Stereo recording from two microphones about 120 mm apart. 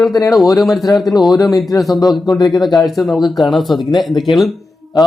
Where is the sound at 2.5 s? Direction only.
Centre (ahead or behind).